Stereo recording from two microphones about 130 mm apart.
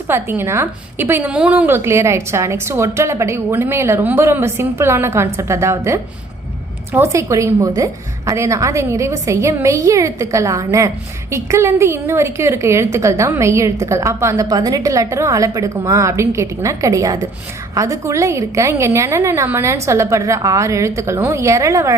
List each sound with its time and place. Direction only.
0.1 s a woman's voice: 20° right (ahead or behind)